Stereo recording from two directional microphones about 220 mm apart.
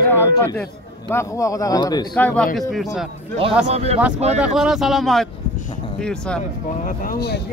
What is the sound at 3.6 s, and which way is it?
Speech, 30° right (ahead or behind).